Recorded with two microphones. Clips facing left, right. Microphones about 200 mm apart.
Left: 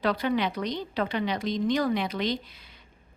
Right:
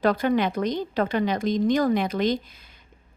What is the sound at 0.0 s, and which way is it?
Speech, 45° right (ahead or behind).